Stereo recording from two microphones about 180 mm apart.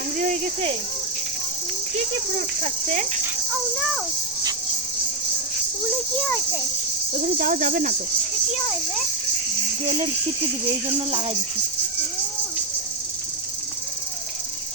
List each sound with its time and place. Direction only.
0.2 s speech: 45° right (ahead or behind)
2.6 s speech: 45° right (ahead or behind)
7.1 s speech: 45° right (ahead or behind)
10.8 s speech: 30° right (ahead or behind)